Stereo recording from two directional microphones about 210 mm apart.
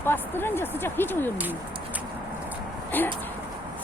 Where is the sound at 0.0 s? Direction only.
10° left (ahead or behind).